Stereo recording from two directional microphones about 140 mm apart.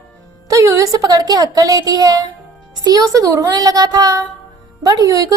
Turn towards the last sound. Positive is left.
turn(degrees=-25)  # may be behind; listen again after turning